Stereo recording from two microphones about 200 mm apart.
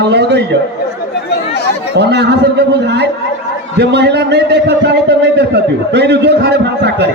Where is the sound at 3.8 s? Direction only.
55° right (ahead or behind).